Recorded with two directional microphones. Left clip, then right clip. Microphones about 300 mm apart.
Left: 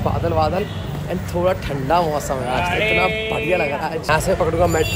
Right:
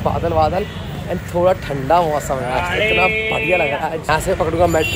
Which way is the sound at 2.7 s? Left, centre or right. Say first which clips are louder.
Right 2 dB; right.